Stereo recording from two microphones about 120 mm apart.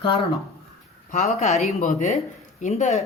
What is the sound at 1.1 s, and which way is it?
Speech, 65° left (ahead or behind).